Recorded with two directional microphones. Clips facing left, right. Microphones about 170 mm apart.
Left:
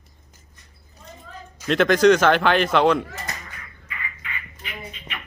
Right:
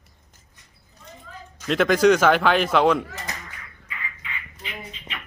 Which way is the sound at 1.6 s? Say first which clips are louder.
Left 1 dB; 5° right (ahead or behind).